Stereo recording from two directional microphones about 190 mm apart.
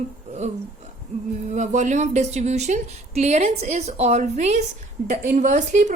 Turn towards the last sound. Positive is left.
turn(degrees=-40)  # may be behind; listen again after turning